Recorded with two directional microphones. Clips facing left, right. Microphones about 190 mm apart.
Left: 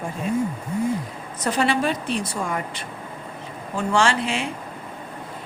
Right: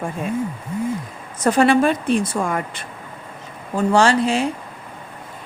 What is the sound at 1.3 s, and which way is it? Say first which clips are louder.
Speech: right 7 dB; 50° right (ahead or behind).